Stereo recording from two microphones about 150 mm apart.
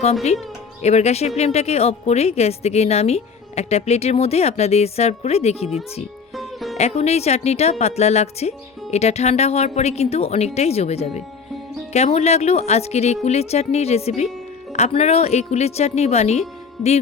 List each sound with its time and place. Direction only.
0.8 s speech: 45° left (ahead or behind)
6.3 s music: centre (ahead or behind)
6.7 s speech: 45° left (ahead or behind)